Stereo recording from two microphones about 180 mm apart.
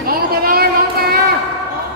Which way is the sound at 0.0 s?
55° right (ahead or behind).